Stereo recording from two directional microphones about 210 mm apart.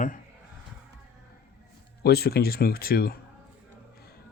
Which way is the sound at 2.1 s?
50° left (ahead or behind).